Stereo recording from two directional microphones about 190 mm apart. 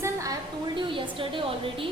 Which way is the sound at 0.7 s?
25° right (ahead or behind).